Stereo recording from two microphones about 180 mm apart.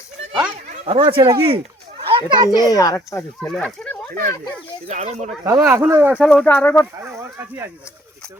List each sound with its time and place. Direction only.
0.5 s speech: 35° right (ahead or behind)
2.6 s speech: 20° left (ahead or behind)
4.9 s speech: 40° right (ahead or behind)
5.5 s speech: 10° right (ahead or behind)
6.4 s speech: 10° left (ahead or behind)
7.0 s speech: 15° right (ahead or behind)